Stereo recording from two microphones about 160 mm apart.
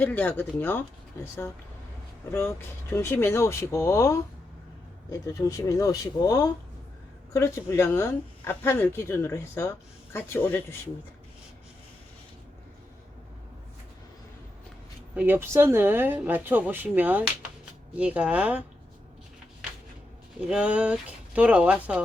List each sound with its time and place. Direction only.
0.0 s speech: 10° left (ahead or behind)
15.1 s speech: 10° right (ahead or behind)
20.5 s speech: 5° right (ahead or behind)